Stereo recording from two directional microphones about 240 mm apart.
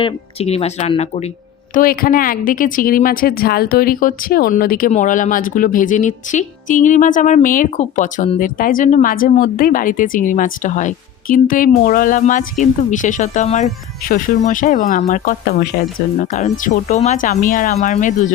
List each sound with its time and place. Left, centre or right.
0.0 s speech: left
1.7 s a woman's voice: left